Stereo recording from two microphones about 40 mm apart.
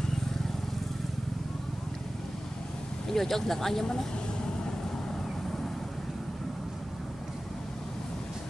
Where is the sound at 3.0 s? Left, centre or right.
Centre.